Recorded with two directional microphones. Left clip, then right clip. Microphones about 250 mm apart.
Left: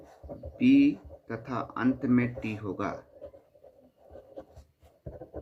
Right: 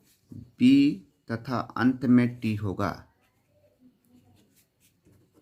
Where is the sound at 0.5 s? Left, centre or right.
Right.